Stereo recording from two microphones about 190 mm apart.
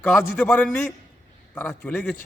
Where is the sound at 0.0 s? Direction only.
5° left (ahead or behind).